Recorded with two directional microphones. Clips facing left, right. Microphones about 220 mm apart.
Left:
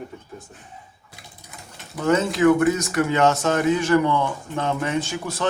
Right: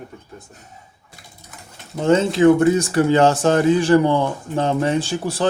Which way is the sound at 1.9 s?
30° right (ahead or behind).